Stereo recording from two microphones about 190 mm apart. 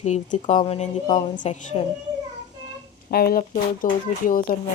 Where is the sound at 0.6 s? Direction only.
30° left (ahead or behind).